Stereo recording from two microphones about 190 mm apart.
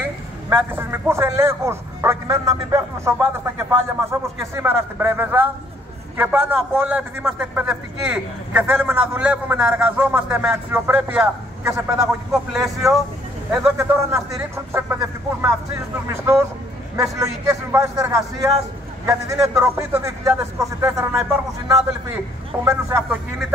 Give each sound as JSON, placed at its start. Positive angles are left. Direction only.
{"t": 0.0, "sound": "a man's voice", "side_deg": -10}
{"t": 16.9, "sound": "a man's voice", "side_deg": -15}
{"t": 22.7, "sound": "a man's voice", "side_deg": -15}